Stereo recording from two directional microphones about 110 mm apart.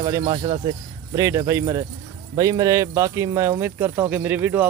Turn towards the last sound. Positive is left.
turn(degrees=-15)  # may be behind; listen again after turning